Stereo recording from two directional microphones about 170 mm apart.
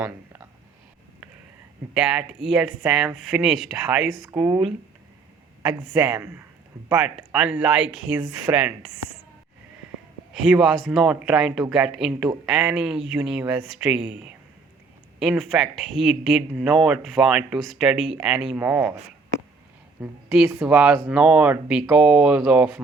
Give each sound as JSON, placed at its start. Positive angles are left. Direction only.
{"t": 1.9, "sound": "speech", "side_deg": -5}
{"t": 4.4, "sound": "speech", "side_deg": -20}
{"t": 5.6, "sound": "speech", "side_deg": -10}
{"t": 10.3, "sound": "speech", "side_deg": 0}
{"t": 20.0, "sound": "a woman's voice", "side_deg": -5}